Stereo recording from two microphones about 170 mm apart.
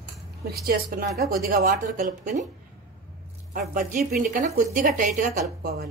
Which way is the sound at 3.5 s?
55° right (ahead or behind).